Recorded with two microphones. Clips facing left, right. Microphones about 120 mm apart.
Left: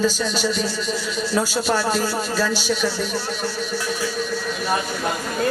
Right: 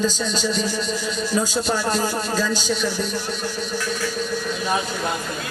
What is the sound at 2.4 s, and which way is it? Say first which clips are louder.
Speech: left 3 dB; 10° left (ahead or behind).